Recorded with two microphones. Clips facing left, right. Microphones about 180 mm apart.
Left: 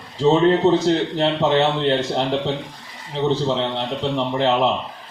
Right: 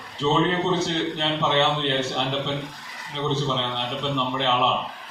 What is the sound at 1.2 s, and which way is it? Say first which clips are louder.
Speech: left 5 dB; 35° left (ahead or behind).